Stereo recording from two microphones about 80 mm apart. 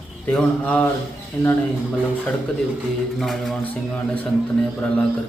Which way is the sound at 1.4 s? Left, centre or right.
Left.